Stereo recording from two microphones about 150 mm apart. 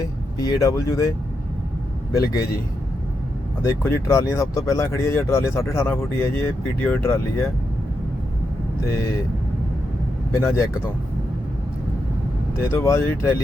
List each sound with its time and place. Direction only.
0.3 s speech: 20° left (ahead or behind)
2.1 s speech: 20° left (ahead or behind)
3.6 s speech: 20° left (ahead or behind)
10.4 s speech: 20° left (ahead or behind)
12.7 s speech: 15° left (ahead or behind)